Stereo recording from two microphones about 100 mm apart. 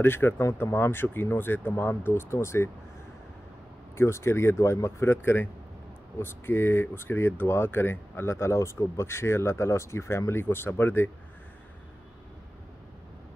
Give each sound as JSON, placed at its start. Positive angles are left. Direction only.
{"t": 0.0, "sound": "speech", "side_deg": 25}
{"t": 3.9, "sound": "speech", "side_deg": 25}